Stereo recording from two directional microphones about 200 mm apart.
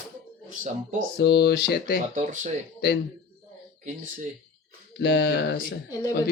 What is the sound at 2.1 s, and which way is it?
Speech, 40° right (ahead or behind).